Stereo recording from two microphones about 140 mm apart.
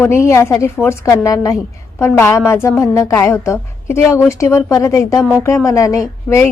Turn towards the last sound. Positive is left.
turn(degrees=20)  # may be behind; listen again after turning